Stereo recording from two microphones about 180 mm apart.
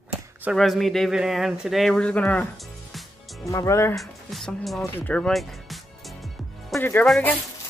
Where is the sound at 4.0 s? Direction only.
Centre (ahead or behind).